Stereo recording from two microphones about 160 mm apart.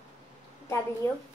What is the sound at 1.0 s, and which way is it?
Speech, 15° left (ahead or behind).